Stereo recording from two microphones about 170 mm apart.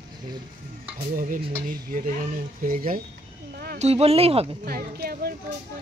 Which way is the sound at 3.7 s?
40° right (ahead or behind).